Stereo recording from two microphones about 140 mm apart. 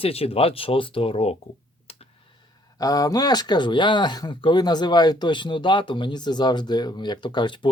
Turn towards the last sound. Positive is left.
turn(degrees=35)  # may be behind; listen again after turning